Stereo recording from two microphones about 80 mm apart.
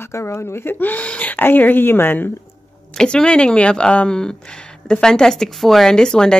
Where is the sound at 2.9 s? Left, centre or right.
Centre.